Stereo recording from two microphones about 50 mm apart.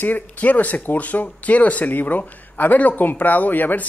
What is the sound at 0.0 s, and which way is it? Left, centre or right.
Speech, left.